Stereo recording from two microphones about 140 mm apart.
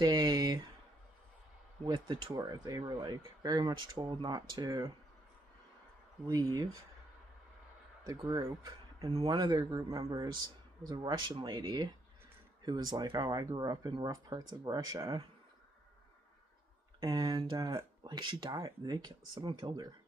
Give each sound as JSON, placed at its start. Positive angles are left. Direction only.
{"t": 0.0, "sound": "speech", "side_deg": -30}
{"t": 1.9, "sound": "speech", "side_deg": -35}
{"t": 6.3, "sound": "speech", "side_deg": -25}
{"t": 8.0, "sound": "speech", "side_deg": -25}
{"t": 17.0, "sound": "speech", "side_deg": -25}